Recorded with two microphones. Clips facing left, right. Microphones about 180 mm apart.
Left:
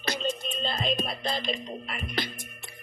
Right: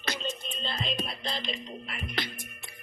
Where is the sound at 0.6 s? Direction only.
45° left (ahead or behind).